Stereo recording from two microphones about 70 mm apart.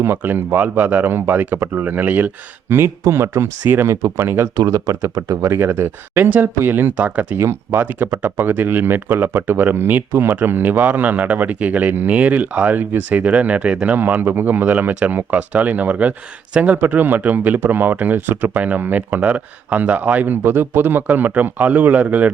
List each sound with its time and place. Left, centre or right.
0.0 s speech: right
4.5 s speech: right
7.3 s speech: right